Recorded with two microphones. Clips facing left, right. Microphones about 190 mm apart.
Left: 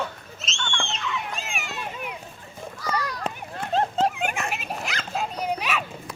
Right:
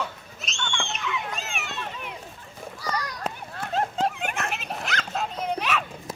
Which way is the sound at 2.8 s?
10° right (ahead or behind).